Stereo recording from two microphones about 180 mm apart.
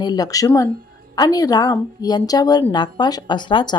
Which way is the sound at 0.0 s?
20° left (ahead or behind).